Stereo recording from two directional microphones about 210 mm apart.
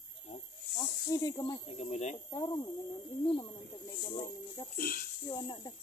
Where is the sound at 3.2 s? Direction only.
20° left (ahead or behind).